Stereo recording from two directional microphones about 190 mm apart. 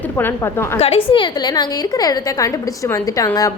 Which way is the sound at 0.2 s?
10° left (ahead or behind).